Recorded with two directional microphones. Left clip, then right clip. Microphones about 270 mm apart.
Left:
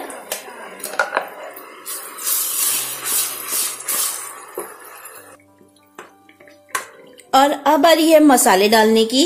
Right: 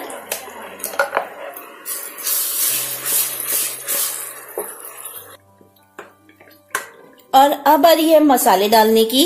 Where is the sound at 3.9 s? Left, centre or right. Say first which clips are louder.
Left 1 dB; centre.